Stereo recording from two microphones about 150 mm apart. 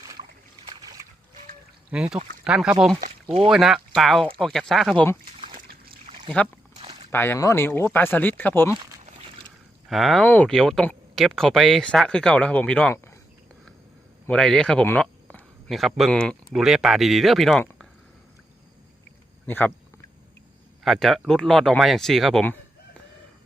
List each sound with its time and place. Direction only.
0.6 s splash: 30° right (ahead or behind)
1.9 s speech: 5° right (ahead or behind)
5.6 s trickle: 85° right
6.4 s speech: 10° left (ahead or behind)
6.7 s a sound: 40° right (ahead or behind)
7.1 s speech: 15° left (ahead or behind)
9.9 s speech: centre (ahead or behind)
14.3 s a sound: 5° left (ahead or behind)
15.7 s speech: centre (ahead or behind)
19.5 s speech: 10° left (ahead or behind)
20.8 s speech: centre (ahead or behind)